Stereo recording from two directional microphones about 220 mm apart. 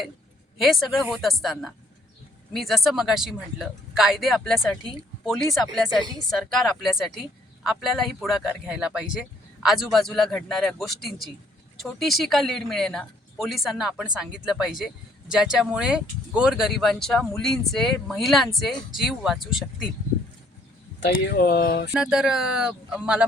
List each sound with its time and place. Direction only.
0.6 s speech: centre (ahead or behind)
21.1 s speech: 45° left (ahead or behind)
21.9 s speech: centre (ahead or behind)